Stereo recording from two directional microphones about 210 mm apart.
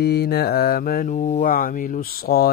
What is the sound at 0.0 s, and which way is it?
Speech, 50° left (ahead or behind).